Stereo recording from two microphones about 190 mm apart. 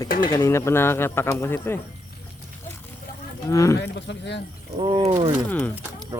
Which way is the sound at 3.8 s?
65° left (ahead or behind).